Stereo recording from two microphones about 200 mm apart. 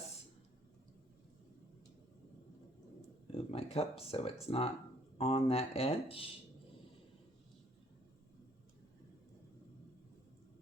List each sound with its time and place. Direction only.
3.3 s speech: 30° left (ahead or behind)